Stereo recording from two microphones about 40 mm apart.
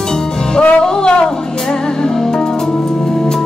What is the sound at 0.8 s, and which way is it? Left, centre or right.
Music, centre.